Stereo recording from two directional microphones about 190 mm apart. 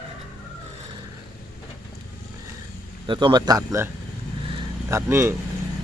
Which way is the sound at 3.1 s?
25° right (ahead or behind).